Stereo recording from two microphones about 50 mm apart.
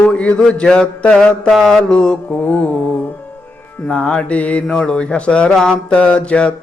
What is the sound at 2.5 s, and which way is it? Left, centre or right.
Mantra, left.